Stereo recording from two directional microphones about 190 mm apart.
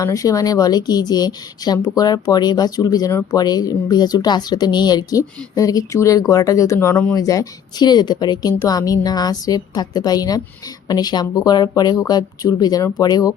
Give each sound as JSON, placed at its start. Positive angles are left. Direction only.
{"t": 0.0, "sound": "a woman's voice", "side_deg": 15}